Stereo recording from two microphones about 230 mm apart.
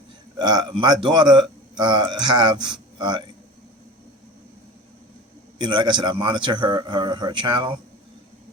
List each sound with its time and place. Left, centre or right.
0.3 s a man's voice: centre
5.5 s a man's voice: centre